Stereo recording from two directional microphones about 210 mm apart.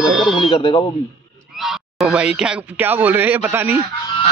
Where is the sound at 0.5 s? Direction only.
25° left (ahead or behind).